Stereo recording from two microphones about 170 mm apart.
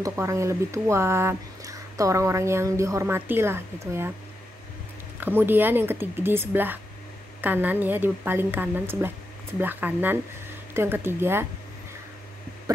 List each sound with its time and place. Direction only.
0.0 s speech: 15° right (ahead or behind)
5.2 s speech: 10° right (ahead or behind)
12.7 s a sound: 20° right (ahead or behind)